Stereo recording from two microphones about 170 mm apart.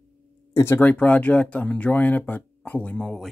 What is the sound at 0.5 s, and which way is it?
Speech, 15° left (ahead or behind).